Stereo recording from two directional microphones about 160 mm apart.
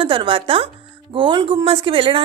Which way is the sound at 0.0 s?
30° right (ahead or behind).